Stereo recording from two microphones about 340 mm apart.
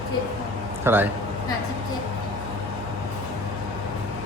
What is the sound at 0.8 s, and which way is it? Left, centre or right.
Speech, centre.